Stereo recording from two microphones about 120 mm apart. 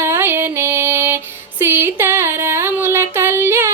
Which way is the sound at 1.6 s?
20° right (ahead or behind).